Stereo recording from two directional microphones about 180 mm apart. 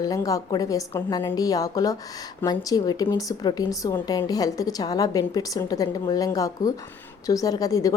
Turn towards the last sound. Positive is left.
turn(degrees=20)  # may be behind; listen again after turning